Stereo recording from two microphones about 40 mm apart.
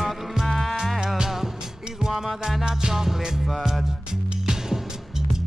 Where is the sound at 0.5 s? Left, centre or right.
Centre.